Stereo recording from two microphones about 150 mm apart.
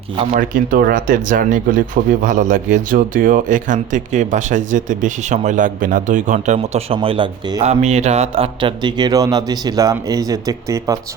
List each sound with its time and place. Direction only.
0.3 s speech: 65° right (ahead or behind)
6.9 s speech: 35° right (ahead or behind)
7.6 s speech: 45° right (ahead or behind); by 11.0 s 20° right (ahead or behind)